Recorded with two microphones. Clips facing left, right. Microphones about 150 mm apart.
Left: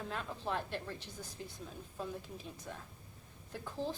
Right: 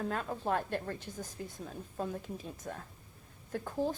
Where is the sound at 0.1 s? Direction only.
45° right (ahead or behind).